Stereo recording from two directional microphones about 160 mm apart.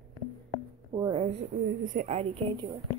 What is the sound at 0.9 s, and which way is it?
Speech, 30° right (ahead or behind).